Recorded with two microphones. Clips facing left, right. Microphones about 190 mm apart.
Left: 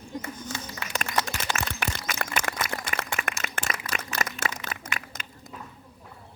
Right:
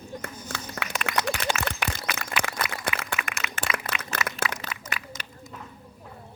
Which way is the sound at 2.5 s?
55° left (ahead or behind).